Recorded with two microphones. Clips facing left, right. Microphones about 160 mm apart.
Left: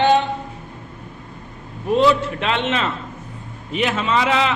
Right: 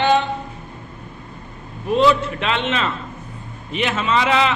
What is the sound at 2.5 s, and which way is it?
Speech, 45° left (ahead or behind).